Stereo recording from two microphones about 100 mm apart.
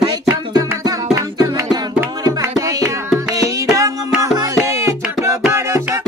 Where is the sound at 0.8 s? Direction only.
40° right (ahead or behind).